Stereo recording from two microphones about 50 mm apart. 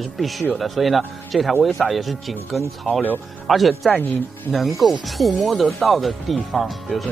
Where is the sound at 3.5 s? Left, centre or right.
Centre.